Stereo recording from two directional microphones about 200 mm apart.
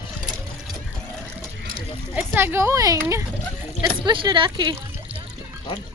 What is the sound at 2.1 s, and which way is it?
Speech, 10° right (ahead or behind).